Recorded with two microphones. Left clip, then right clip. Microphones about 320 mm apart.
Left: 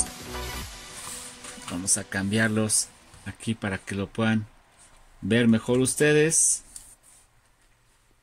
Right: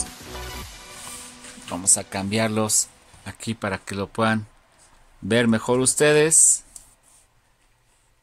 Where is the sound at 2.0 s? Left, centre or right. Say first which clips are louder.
Right 2 dB; centre.